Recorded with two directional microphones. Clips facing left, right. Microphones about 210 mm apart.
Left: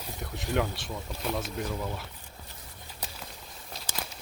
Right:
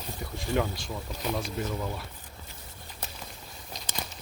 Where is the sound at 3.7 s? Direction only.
5° left (ahead or behind).